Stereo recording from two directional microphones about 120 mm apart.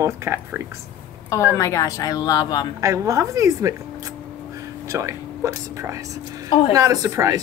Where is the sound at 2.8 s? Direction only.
25° right (ahead or behind).